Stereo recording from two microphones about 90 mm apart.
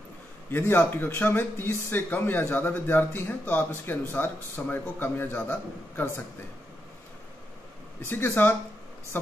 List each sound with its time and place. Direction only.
0.5 s speech: 25° left (ahead or behind)
8.1 s a woman's voice: 20° left (ahead or behind)